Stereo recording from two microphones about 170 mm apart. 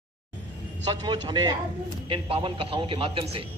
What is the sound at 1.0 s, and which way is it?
A man's voice, 25° right (ahead or behind).